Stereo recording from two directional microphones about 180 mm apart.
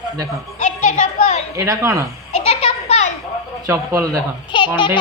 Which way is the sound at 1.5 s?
15° right (ahead or behind).